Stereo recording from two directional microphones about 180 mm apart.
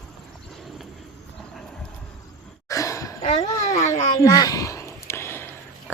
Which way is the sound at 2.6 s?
15° left (ahead or behind).